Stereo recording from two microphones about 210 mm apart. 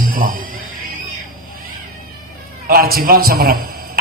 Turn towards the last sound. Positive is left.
turn(degrees=-45)  # may be behind; listen again after turning